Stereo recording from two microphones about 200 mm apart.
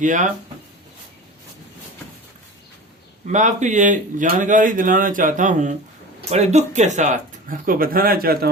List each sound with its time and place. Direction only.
0.0 s speech: 40° right (ahead or behind)
3.2 s speech: 35° right (ahead or behind)